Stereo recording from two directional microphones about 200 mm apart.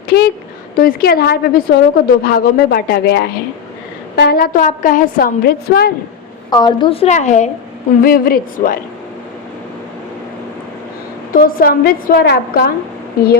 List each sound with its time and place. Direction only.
0.8 s a woman's voice: 50° left (ahead or behind)
6.5 s a woman's voice: 20° left (ahead or behind)
8.0 s a woman's voice: 45° left (ahead or behind)
11.3 s a woman's voice: 45° left (ahead or behind)